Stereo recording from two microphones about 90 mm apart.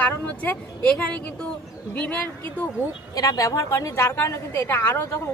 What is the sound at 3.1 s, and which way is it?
Speech, 40° left (ahead or behind).